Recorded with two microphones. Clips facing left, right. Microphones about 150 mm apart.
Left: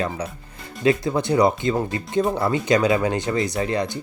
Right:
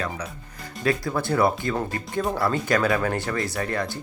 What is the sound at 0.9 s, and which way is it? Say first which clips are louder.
Speech: left 5 dB; 20° left (ahead or behind).